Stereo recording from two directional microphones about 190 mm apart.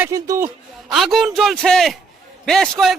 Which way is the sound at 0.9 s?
Centre (ahead or behind).